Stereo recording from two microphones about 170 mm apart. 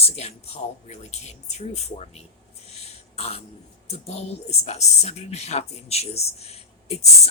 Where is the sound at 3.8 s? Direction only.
40° left (ahead or behind).